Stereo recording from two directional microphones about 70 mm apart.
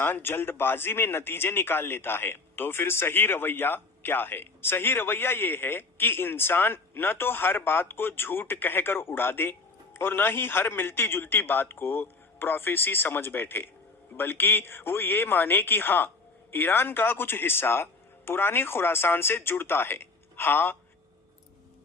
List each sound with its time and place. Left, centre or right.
0.0 s speech: left